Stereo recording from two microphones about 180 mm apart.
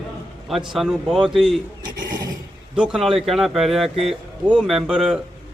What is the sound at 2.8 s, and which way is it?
A man's voice, centre (ahead or behind).